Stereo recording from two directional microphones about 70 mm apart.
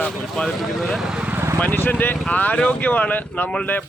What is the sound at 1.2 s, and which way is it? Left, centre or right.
Vehicle, right.